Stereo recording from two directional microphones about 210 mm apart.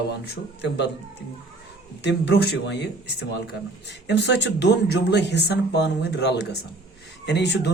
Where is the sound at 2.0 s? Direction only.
55° left (ahead or behind).